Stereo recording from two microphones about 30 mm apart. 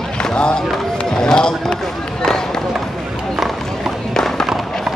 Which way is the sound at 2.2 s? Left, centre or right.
Centre.